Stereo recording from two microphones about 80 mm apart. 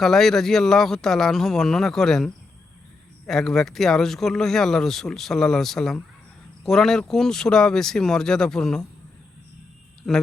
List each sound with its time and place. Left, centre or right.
0.0 s speech: centre
10.0 s speech: centre